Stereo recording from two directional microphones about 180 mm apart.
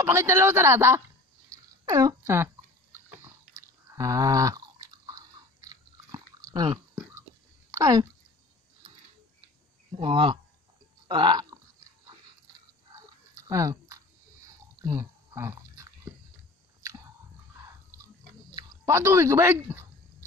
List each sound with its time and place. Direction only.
0.0 s speech: 15° right (ahead or behind)
1.5 s a sound: 20° right (ahead or behind)
3.2 s chewing: 15° right (ahead or behind)
7.7 s speech: 20° right (ahead or behind)
9.9 s speech: 30° right (ahead or behind)
12.9 s chewing: 20° right (ahead or behind)
14.8 s a sound: 20° right (ahead or behind)
18.5 s speech: 20° right (ahead or behind)